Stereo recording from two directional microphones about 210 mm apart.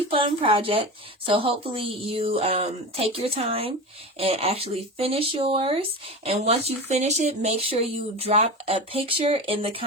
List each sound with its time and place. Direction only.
0.1 s a woman's voice: 25° right (ahead or behind)